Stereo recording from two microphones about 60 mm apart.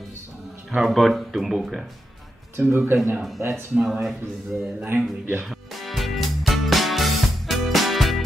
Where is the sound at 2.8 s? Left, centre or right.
Right.